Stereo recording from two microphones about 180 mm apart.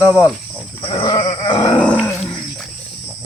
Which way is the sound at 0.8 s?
30° left (ahead or behind).